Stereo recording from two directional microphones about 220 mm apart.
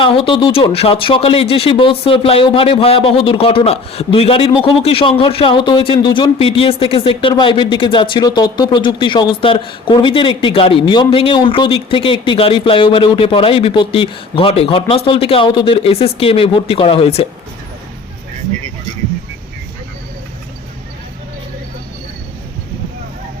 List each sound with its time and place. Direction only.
0.0 s speech: 25° left (ahead or behind)